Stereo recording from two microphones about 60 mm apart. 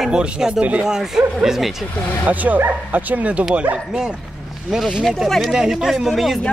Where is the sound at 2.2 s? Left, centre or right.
Right; by 5.5 s centre.